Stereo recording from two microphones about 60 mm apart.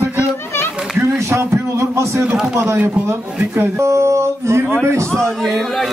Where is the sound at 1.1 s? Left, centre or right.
Right.